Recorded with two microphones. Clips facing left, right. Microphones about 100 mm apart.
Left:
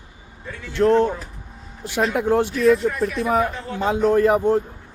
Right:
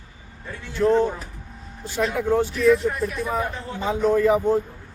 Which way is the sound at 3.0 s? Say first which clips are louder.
Left 5 dB; 90° left.